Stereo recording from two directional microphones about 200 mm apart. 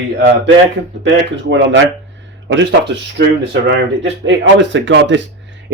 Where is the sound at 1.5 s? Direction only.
65° right (ahead or behind).